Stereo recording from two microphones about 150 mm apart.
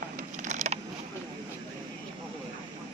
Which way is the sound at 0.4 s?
50° right (ahead or behind).